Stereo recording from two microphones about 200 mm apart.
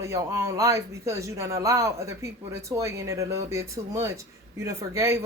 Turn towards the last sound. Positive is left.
turn(degrees=-15)  # may be behind; listen again after turning